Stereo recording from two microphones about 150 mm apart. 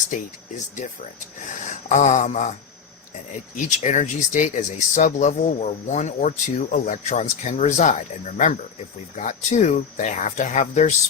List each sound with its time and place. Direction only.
0.1 s speech: 55° left (ahead or behind)